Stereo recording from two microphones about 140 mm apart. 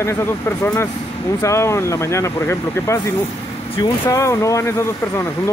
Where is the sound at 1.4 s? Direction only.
20° left (ahead or behind).